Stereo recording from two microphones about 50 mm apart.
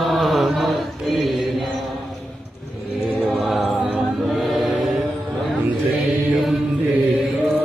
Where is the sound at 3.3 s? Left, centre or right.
Centre.